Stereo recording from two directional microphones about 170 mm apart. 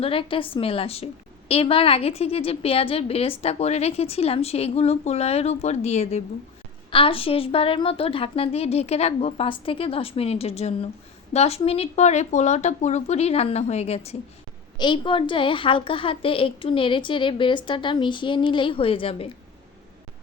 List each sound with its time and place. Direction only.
0.0 s a woman's voice: 30° left (ahead or behind)